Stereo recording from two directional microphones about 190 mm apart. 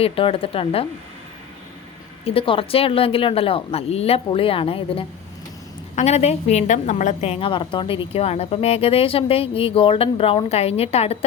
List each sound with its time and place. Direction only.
0.0 s speech: 30° left (ahead or behind)
2.2 s a woman's voice: 30° left (ahead or behind)